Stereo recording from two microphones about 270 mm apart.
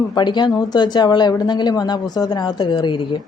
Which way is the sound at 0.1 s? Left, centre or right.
Centre.